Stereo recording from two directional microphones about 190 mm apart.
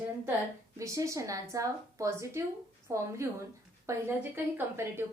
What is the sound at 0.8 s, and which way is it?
A woman's voice, 15° right (ahead or behind).